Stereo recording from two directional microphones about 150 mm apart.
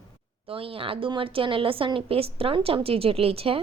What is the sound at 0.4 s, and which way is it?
A woman's voice, 40° right (ahead or behind).